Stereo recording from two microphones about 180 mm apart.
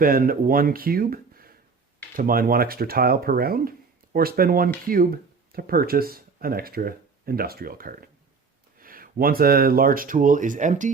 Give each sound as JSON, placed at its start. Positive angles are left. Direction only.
{"t": 0.0, "sound": "speech", "side_deg": -50}